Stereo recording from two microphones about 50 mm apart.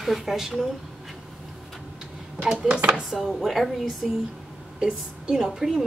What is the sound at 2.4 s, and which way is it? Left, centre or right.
Speech, centre.